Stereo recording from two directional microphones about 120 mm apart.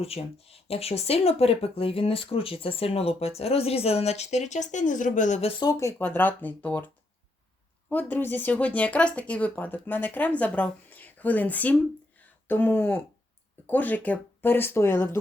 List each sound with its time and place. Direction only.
0.0 s speech: 55° left (ahead or behind); by 5.5 s 85° left
6.0 s speech: 15° left (ahead or behind)